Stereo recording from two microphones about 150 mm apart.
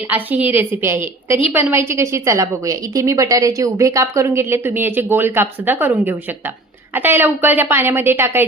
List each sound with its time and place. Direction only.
0.1 s a woman's voice: 10° right (ahead or behind)